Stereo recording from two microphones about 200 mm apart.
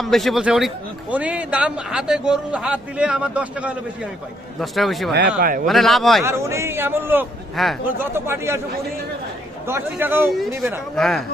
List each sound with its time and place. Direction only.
0.0 s a man's voice: centre (ahead or behind)
5.4 s a man's voice: 45° right (ahead or behind)
5.6 s a man's voice: centre (ahead or behind)
6.2 s a man's voice: 15° right (ahead or behind)
7.5 s speech: centre (ahead or behind)
7.9 s a man's voice: 10° right (ahead or behind)
9.6 s a man's voice: 10° right (ahead or behind)
10.9 s a man's voice: centre (ahead or behind)